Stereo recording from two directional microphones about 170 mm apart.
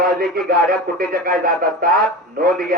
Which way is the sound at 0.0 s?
60° right (ahead or behind).